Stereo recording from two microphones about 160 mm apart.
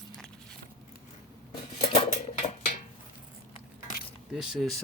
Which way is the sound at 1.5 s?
30° left (ahead or behind).